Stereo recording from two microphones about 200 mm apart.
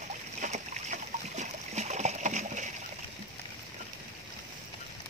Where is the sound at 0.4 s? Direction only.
35° right (ahead or behind).